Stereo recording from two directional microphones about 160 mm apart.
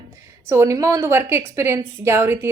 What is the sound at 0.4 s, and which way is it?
A woman's voice, 20° right (ahead or behind).